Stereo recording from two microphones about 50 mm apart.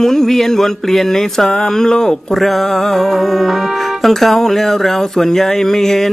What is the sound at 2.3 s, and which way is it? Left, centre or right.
Speech, centre.